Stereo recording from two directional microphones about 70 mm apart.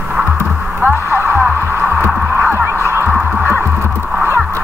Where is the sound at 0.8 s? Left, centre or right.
Right.